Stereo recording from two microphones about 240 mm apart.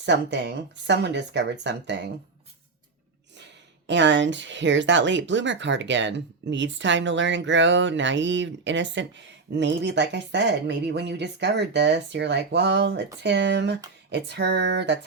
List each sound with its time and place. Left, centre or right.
0.0 s speech: right
3.3 s speech: right